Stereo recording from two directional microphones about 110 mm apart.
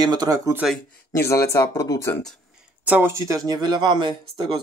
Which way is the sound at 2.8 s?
15° right (ahead or behind).